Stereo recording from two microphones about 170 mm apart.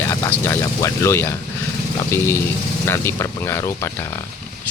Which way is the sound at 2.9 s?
15° left (ahead or behind).